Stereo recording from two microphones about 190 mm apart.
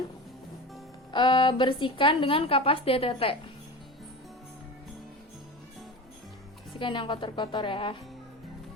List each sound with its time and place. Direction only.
1.1 s a woman's voice: 25° left (ahead or behind)
6.7 s a woman's voice: 25° left (ahead or behind)